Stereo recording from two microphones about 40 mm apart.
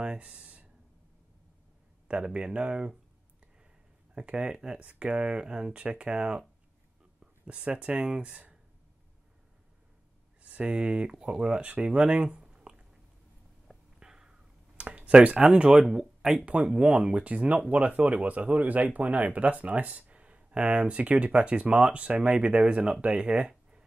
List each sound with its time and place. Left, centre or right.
0.2 s a sound: right
2.0 s speech: right
4.1 s speech: right
7.4 s speech: right
10.4 s speech: right
13.9 s cat: centre
14.8 s speech: right
15.8 s speech: centre
16.9 s speech: right